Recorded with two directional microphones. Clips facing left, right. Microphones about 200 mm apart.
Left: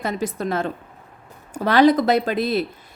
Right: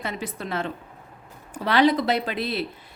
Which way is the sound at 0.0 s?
45° left (ahead or behind).